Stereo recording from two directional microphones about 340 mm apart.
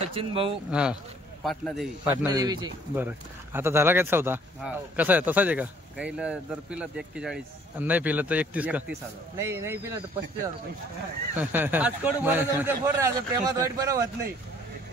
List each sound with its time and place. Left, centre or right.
0.0 s speech: centre
0.7 s speech: centre
2.2 s a man's voice: centre
11.3 s speech: centre